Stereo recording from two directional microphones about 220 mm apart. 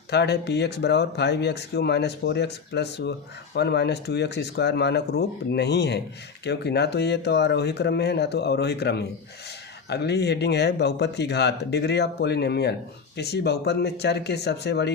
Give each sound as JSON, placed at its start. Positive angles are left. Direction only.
{"t": 0.1, "sound": "speech", "side_deg": 50}